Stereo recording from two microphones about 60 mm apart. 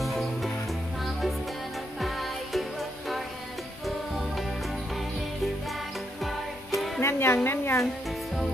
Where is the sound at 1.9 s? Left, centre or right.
Centre.